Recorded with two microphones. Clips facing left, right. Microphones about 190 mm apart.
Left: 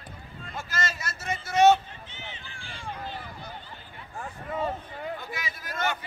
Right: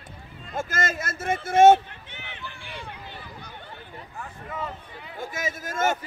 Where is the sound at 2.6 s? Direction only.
60° right (ahead or behind).